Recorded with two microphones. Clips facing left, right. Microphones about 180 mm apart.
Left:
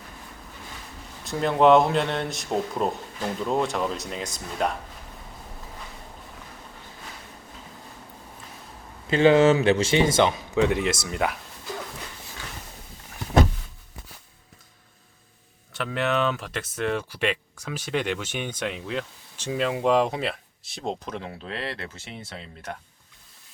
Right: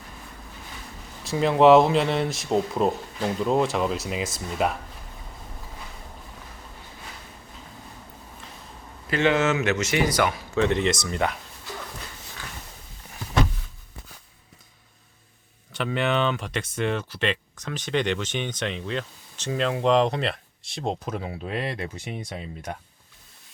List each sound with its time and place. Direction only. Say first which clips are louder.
1.2 s speech: right 2 dB; centre (ahead or behind)
9.0 s speech: left 5 dB; 30° left (ahead or behind)
10.6 s speech: even; 10° left (ahead or behind)
15.7 s speech: right 1 dB; centre (ahead or behind)